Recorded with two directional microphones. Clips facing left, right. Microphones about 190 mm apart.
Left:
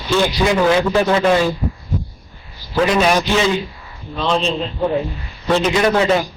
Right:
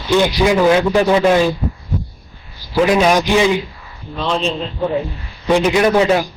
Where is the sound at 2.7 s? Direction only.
15° right (ahead or behind).